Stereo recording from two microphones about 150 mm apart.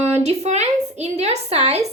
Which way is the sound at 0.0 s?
45° right (ahead or behind).